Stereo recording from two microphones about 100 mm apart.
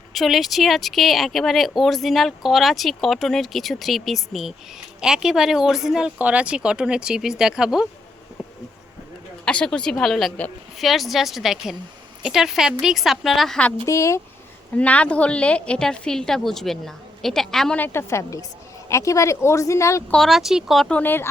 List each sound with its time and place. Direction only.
0.1 s speech: centre (ahead or behind)
9.4 s a woman's voice: 10° left (ahead or behind)
13.8 s speech: 30° left (ahead or behind)
14.8 s a woman's voice: 15° left (ahead or behind)
17.7 s speech: 20° left (ahead or behind)
20.1 s speech: 5° left (ahead or behind)
20.9 s speech: 20° left (ahead or behind)